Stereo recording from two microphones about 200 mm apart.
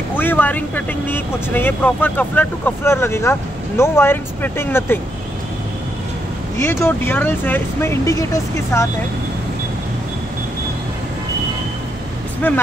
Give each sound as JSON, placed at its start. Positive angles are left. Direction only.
{"t": 0.1, "sound": "speech", "side_deg": 10}
{"t": 6.6, "sound": "speech", "side_deg": 10}
{"t": 12.4, "sound": "speech", "side_deg": 10}